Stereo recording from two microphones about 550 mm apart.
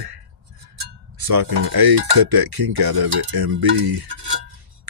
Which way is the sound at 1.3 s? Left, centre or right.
Right.